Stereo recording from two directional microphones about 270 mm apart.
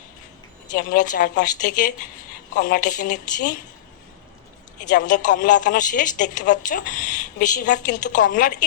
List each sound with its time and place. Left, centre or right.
0.7 s a woman's voice: left
4.9 s a woman's voice: left